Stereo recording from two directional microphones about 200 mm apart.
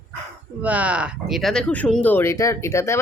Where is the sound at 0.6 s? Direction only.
5° right (ahead or behind).